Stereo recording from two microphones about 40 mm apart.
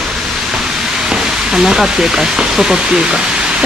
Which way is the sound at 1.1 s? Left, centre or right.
Centre.